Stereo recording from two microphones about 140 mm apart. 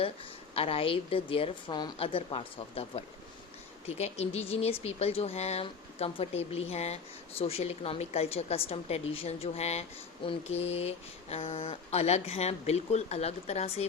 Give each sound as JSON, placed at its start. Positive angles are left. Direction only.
{"t": 0.5, "sound": "a woman's voice", "side_deg": 45}
{"t": 2.0, "sound": "speech", "side_deg": 40}